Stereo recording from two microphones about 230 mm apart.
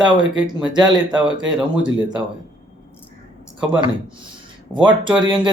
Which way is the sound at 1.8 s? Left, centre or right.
Centre.